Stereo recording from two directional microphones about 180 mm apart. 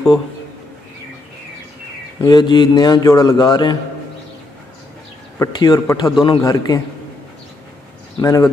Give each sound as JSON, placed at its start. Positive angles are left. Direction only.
{"t": 2.2, "sound": "a man's voice", "side_deg": 25}
{"t": 5.4, "sound": "a man's voice", "side_deg": 20}
{"t": 8.2, "sound": "speech", "side_deg": 15}